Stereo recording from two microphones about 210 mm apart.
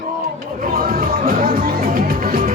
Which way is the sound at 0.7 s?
45° right (ahead or behind).